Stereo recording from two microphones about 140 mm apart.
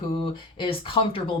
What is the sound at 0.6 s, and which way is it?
Speech, 40° left (ahead or behind).